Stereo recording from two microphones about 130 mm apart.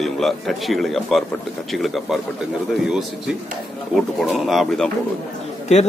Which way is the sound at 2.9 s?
5° right (ahead or behind).